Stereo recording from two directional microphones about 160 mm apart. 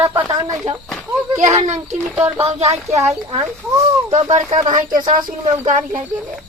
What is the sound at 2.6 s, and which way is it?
Speech, 40° right (ahead or behind).